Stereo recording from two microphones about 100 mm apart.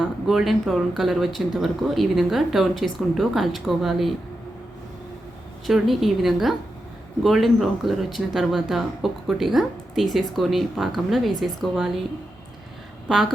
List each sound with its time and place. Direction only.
0.0 s speech: 5° right (ahead or behind)
5.6 s speech: centre (ahead or behind)
13.1 s a woman's voice: 5° right (ahead or behind)